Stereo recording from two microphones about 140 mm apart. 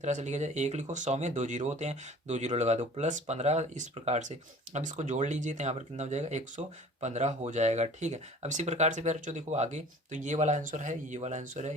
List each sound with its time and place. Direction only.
0.0 s speech: 60° right (ahead or behind)